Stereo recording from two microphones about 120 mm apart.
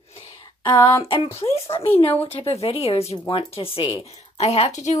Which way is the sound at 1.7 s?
55° left (ahead or behind).